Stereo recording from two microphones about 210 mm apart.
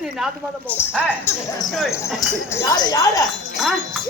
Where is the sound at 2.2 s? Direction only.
15° left (ahead or behind).